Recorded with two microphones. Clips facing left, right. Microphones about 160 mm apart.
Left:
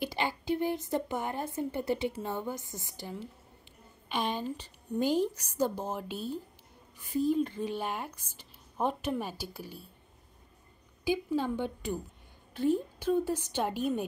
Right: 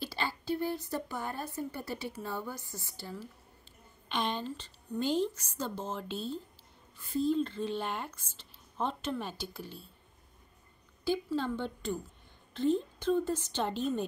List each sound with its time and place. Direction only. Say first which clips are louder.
0.0 s a woman's voice: left 4 dB; 15° left (ahead or behind)
11.1 s speech: left 2 dB; 10° left (ahead or behind)